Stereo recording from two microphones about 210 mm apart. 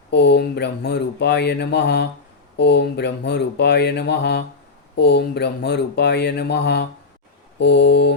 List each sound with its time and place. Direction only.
0.1 s speech: 55° left (ahead or behind)
7.6 s mantra: 55° left (ahead or behind)